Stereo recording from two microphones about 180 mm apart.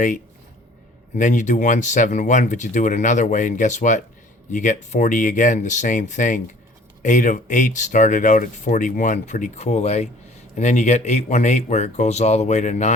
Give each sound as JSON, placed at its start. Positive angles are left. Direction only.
{"t": 1.1, "sound": "speech", "side_deg": 45}